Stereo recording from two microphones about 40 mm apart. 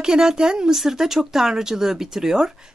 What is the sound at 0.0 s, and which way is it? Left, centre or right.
A woman's voice, centre.